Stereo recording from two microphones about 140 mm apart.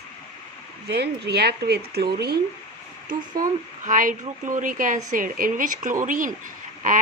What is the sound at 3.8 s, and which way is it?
A woman's voice, 70° right (ahead or behind).